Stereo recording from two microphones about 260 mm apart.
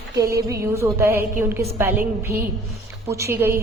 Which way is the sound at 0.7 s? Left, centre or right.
Centre.